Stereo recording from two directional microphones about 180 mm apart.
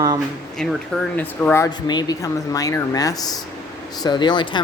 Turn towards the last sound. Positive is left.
turn(degrees=25)  # may be behind; listen again after turning